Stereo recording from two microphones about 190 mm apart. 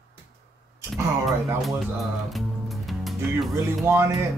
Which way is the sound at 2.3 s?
Centre (ahead or behind).